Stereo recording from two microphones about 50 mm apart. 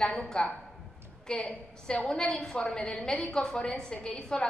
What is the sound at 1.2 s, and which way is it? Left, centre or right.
A woman's voice, centre.